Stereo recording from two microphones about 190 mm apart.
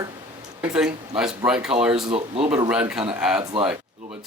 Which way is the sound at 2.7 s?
5° right (ahead or behind).